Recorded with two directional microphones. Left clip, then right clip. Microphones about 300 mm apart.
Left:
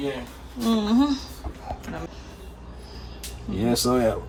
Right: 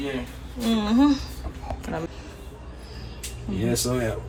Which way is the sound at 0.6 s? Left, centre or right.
Centre.